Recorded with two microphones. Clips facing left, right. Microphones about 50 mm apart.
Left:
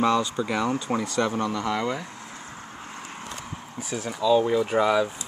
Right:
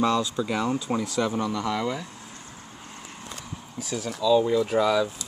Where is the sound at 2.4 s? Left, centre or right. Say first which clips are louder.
Left 4 dB; left.